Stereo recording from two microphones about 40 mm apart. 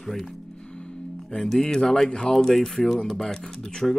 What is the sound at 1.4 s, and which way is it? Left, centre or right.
Speech, centre.